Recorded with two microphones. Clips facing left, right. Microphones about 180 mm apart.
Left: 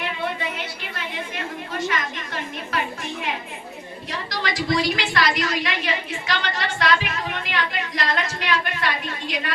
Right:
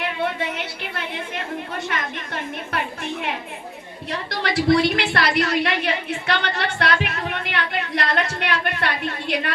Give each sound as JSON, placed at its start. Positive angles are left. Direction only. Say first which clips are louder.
{"t": 1.9, "sound": "a woman's voice", "louder": "even", "side_deg": -55}
{"t": 4.3, "sound": "a woman's voice", "louder": "right 6 dB", "side_deg": -60}